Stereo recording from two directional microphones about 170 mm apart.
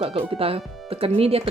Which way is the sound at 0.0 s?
35° right (ahead or behind).